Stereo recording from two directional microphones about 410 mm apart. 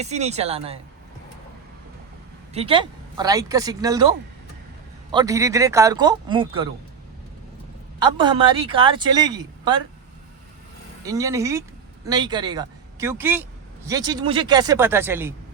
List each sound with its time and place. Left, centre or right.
0.0 s speech: centre
2.5 s speech: centre
5.1 s speech: centre
7.9 s speech: centre
11.0 s speech: centre